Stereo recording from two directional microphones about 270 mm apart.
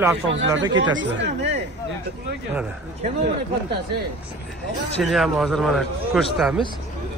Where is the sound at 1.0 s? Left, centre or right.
Right.